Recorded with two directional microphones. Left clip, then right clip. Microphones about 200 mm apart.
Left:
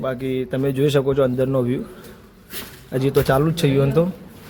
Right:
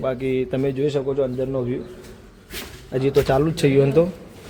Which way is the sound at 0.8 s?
35° left (ahead or behind).